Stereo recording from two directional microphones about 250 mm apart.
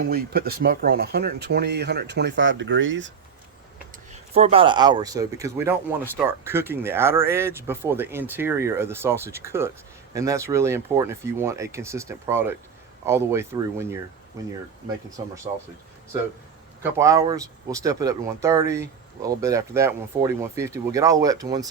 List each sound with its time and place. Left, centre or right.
0.0 s speech: right
4.1 s speech: right
16.8 s speech: centre